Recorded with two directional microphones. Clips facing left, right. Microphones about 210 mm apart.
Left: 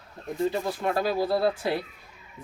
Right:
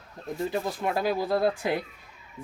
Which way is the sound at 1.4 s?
15° right (ahead or behind).